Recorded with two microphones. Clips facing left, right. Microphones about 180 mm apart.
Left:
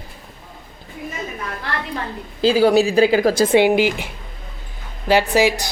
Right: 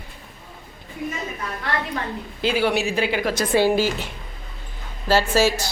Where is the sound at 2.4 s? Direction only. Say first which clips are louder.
Left 7 dB; 35° left (ahead or behind).